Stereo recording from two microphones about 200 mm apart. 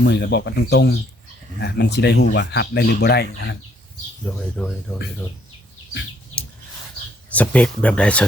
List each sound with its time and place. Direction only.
0.0 s speech: 55° left (ahead or behind)
4.4 s speech: 5° left (ahead or behind)
7.3 s speech: 5° left (ahead or behind)